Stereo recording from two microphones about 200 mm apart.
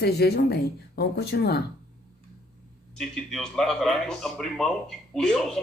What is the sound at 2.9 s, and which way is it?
Speech, centre (ahead or behind).